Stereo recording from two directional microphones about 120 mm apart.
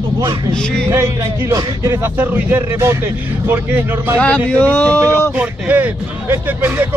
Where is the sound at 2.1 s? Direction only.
15° right (ahead or behind).